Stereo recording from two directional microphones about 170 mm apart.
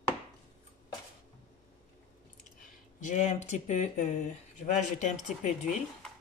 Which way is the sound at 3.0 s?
45° left (ahead or behind).